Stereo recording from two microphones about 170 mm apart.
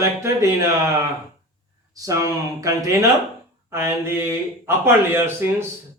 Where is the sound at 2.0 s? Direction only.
20° right (ahead or behind).